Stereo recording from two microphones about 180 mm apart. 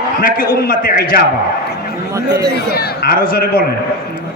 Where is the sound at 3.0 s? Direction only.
55° left (ahead or behind).